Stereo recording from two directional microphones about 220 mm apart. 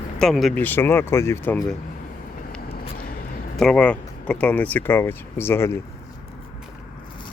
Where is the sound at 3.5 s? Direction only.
5° left (ahead or behind).